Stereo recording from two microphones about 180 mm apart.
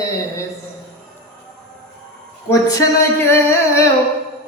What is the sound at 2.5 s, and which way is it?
Speech, 20° left (ahead or behind).